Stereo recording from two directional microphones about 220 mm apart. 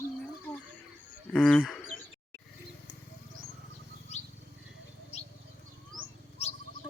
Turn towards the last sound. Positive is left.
turn(degrees=30)  # may be behind; listen again after turning